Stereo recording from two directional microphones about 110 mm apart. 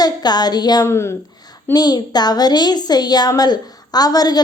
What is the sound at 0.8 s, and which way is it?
Speech, 25° left (ahead or behind).